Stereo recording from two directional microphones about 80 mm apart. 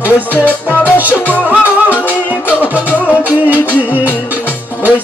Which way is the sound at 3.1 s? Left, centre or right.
Right.